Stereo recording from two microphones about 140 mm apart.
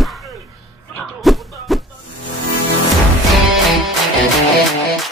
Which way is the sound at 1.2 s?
Centre (ahead or behind).